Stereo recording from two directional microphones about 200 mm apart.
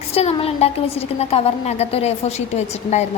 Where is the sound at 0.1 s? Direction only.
30° left (ahead or behind).